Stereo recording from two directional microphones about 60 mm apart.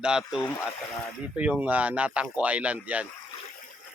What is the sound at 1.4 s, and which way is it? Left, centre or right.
Speech, right.